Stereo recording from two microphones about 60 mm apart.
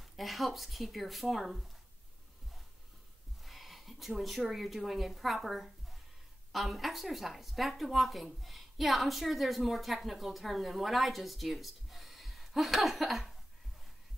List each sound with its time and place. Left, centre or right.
0.0 s speech: centre
3.4 s a woman's voice: centre